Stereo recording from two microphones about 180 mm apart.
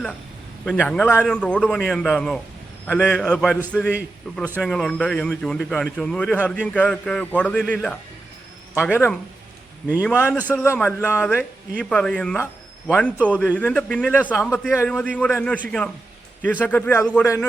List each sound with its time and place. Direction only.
0.6 s a man's voice: 5° left (ahead or behind)